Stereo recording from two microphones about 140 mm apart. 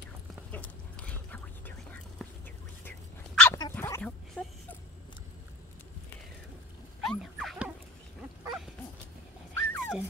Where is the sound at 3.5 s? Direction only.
15° left (ahead or behind).